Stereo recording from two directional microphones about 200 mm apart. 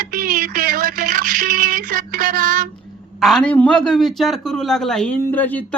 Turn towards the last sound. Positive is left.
turn(degrees=10)  # may be behind; listen again after turning